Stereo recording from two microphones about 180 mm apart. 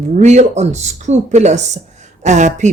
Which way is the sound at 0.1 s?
40° right (ahead or behind).